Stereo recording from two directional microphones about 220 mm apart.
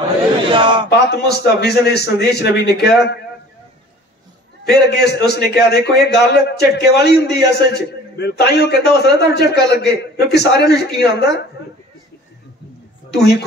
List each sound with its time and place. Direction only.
0.5 s a sound: 20° right (ahead or behind)
0.8 s a man's voice: 50° left (ahead or behind)
4.6 s a man's voice: 50° left (ahead or behind)